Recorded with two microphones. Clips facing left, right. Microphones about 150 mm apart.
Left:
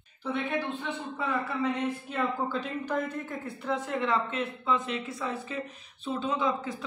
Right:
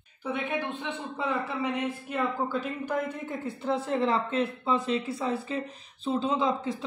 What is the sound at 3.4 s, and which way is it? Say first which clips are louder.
Speech: right 4 dB; 30° right (ahead or behind).